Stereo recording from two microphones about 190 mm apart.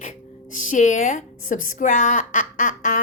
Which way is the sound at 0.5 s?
45° left (ahead or behind).